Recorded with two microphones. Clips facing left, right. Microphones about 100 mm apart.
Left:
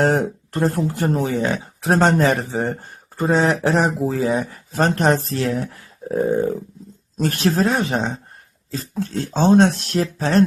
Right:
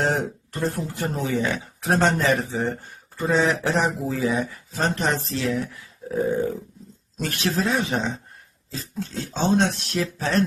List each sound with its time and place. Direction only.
0.0 s speech: 50° left (ahead or behind)
6.1 s dog: 40° left (ahead or behind)
7.2 s speech: 40° left (ahead or behind)